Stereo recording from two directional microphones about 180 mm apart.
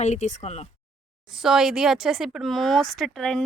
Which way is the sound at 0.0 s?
40° left (ahead or behind).